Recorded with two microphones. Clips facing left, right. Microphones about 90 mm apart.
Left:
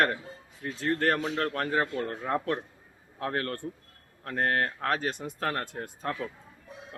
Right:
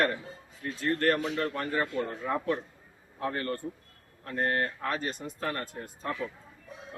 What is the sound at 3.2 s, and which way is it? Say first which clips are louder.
Speech: even; 85° left.